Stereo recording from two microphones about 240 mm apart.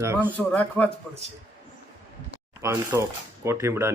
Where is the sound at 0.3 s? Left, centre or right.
Centre.